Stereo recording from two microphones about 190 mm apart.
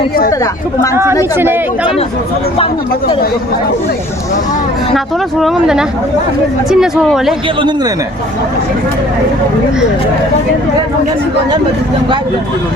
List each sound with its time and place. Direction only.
1.4 s speech: 10° right (ahead or behind)
5.4 s speech: centre (ahead or behind)